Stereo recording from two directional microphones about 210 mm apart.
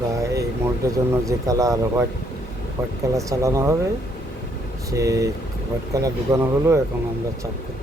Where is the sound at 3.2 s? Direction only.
15° right (ahead or behind).